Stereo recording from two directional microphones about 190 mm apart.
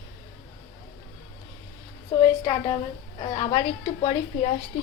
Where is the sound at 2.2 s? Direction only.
20° left (ahead or behind).